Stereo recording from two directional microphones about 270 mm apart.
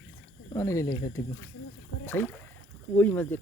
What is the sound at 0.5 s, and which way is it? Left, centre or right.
Speech, centre.